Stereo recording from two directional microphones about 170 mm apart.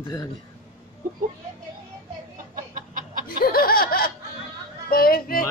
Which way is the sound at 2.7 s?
50° right (ahead or behind).